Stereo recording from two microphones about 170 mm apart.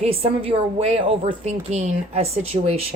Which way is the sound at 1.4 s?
40° right (ahead or behind).